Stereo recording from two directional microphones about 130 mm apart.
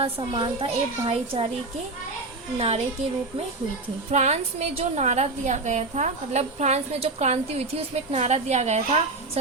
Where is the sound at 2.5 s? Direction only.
50° right (ahead or behind).